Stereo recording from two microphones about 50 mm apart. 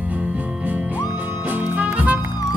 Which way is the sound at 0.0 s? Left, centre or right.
Right.